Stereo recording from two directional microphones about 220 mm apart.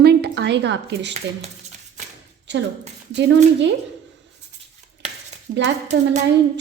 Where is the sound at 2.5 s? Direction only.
55° right (ahead or behind).